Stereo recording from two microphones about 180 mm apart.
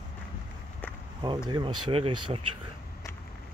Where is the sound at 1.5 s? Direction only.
25° right (ahead or behind).